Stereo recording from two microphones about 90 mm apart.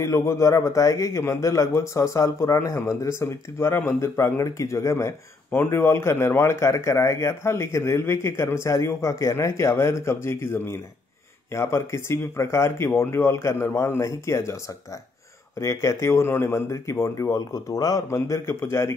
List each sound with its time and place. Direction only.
0.0 s speech: 35° left (ahead or behind)
15.6 s speech: 35° left (ahead or behind)